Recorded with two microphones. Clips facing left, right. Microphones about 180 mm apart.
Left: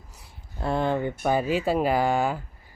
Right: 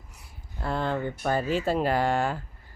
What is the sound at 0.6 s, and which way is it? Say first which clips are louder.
Speech: left 3 dB; 15° left (ahead or behind).